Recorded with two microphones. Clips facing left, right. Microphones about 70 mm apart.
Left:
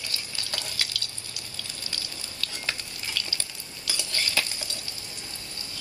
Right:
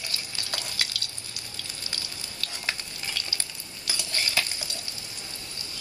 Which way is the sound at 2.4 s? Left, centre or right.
Right.